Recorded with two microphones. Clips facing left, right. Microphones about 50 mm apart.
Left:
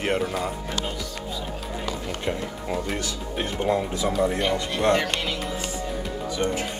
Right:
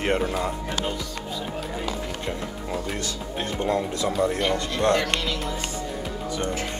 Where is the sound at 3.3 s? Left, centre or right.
Centre.